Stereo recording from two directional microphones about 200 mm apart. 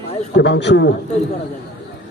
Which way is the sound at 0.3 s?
60° left (ahead or behind).